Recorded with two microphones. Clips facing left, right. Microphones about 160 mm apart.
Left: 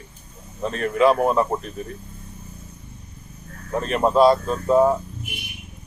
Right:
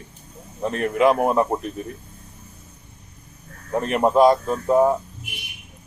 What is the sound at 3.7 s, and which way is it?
Speech, 15° right (ahead or behind).